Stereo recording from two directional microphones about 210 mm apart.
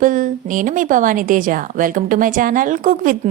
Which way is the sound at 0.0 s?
40° right (ahead or behind).